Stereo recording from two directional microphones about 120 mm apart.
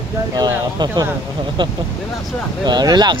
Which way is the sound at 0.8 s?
40° right (ahead or behind).